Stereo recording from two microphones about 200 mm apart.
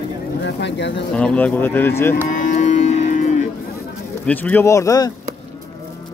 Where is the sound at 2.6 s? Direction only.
40° left (ahead or behind).